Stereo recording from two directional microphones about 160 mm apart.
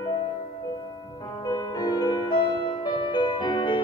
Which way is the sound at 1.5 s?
25° left (ahead or behind).